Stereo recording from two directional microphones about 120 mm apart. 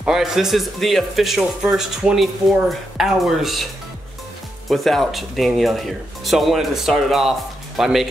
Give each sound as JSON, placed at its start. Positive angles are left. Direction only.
{"t": 0.0, "sound": "speech", "side_deg": -5}
{"t": 4.6, "sound": "speech", "side_deg": 0}